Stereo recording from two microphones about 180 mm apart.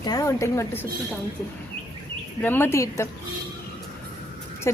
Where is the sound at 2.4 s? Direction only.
10° left (ahead or behind).